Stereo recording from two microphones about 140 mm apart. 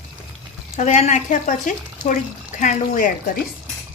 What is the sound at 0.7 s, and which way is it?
Speech, 55° left (ahead or behind).